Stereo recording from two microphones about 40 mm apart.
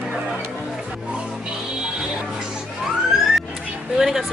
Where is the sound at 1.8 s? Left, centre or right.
Centre.